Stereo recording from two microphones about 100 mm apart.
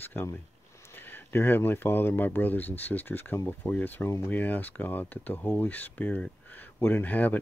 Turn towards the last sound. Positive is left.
turn(degrees=15)  # may be behind; listen again after turning